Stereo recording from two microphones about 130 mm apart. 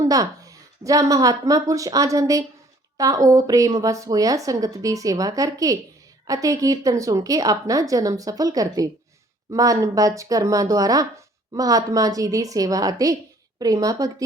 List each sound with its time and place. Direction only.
0.1 s a woman's voice: 25° right (ahead or behind)